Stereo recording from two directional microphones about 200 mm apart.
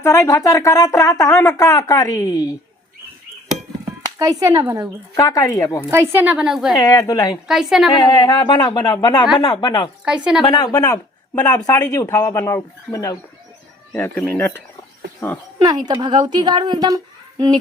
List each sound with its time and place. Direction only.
0.0 s speech: 15° left (ahead or behind)
4.0 s speech: 15° right (ahead or behind)
5.1 s speech: 15° left (ahead or behind)
5.9 s a woman's voice: 15° right (ahead or behind)
6.7 s speech: 15° left (ahead or behind)
7.4 s a woman's voice: centre (ahead or behind)
7.9 s speech: 20° left (ahead or behind)
10.1 s a woman's voice: 5° right (ahead or behind)
10.4 s speech: 20° left (ahead or behind)
15.5 s a woman's voice: 20° right (ahead or behind)